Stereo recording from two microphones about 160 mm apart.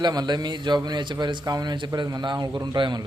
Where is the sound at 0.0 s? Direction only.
25° right (ahead or behind).